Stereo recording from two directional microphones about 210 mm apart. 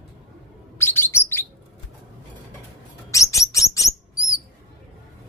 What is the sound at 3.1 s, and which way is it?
Bird, 15° left (ahead or behind).